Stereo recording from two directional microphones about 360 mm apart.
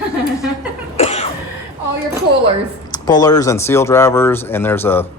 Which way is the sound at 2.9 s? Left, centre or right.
Centre.